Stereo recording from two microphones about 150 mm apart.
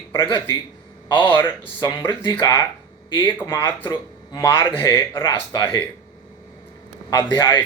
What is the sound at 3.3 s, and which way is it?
Speech, 20° left (ahead or behind).